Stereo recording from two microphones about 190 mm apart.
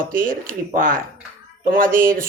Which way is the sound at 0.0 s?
45° right (ahead or behind).